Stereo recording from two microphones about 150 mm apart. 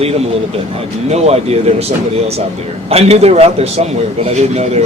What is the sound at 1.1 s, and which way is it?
A man's voice, 45° right (ahead or behind).